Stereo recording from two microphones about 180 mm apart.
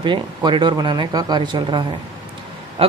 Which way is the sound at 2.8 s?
30° right (ahead or behind).